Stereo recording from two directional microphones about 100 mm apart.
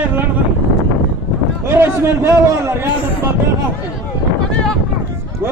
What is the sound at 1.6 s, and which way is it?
A man's voice, 25° right (ahead or behind).